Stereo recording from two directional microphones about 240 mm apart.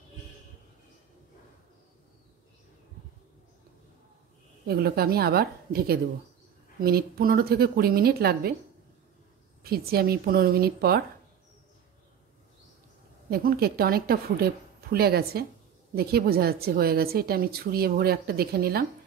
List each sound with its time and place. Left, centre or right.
4.6 s a woman's voice: right
9.6 s a woman's voice: right
13.3 s a woman's voice: right